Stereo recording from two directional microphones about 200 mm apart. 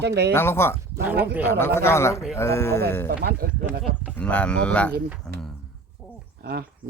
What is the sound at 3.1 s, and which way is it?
Speech, 55° right (ahead or behind).